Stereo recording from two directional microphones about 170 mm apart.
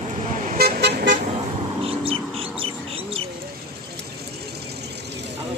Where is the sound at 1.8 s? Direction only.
35° right (ahead or behind).